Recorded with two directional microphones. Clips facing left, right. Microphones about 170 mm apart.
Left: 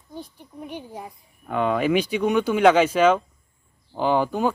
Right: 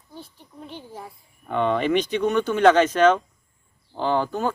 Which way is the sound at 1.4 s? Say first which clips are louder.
Even; 5° left (ahead or behind).